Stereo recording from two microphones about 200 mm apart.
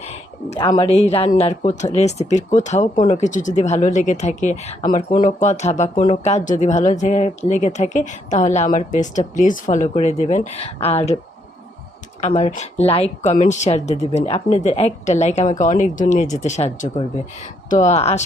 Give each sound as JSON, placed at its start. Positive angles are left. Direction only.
{"t": 0.0, "sound": "a sound", "side_deg": 30}
{"t": 0.7, "sound": "speech", "side_deg": 25}
{"t": 12.2, "sound": "speech", "side_deg": 35}